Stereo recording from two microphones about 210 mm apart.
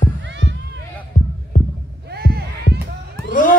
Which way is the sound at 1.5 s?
40° left (ahead or behind).